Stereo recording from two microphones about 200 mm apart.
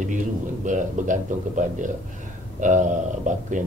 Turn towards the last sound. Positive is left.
turn(degrees=-40)  # may be behind; listen again after turning